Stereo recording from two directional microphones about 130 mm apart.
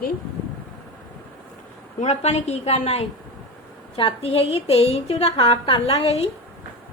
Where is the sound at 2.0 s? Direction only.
55° left (ahead or behind).